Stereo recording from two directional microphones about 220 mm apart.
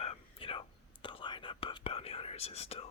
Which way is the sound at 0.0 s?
25° left (ahead or behind).